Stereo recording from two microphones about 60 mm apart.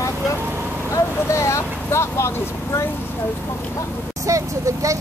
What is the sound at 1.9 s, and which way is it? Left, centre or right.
Speech, left.